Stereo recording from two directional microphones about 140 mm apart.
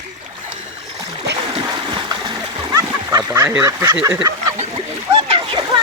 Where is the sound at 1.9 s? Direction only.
30° right (ahead or behind).